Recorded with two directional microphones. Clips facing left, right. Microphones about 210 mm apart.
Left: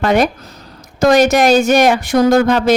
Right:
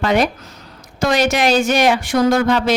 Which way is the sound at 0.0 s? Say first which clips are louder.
Left 3 dB; 50° left (ahead or behind).